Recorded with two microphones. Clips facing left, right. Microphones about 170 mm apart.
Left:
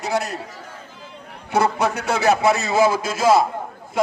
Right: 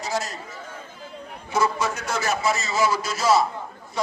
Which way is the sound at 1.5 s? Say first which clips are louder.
Left 4 dB; 60° left (ahead or behind).